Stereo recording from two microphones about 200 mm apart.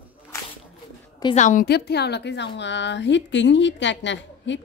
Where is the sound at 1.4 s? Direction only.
40° left (ahead or behind).